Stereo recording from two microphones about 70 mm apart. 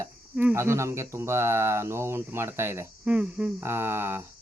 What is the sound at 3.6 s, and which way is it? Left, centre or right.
Speech, right.